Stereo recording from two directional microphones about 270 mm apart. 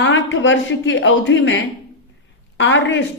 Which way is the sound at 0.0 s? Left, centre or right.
Left.